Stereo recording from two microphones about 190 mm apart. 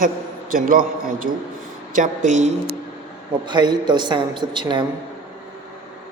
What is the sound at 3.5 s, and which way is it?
A man's voice, 25° right (ahead or behind).